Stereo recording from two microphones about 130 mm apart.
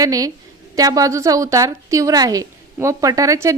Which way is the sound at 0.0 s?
25° right (ahead or behind).